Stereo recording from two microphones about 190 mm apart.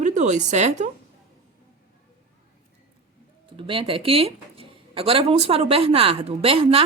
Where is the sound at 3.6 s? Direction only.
25° right (ahead or behind).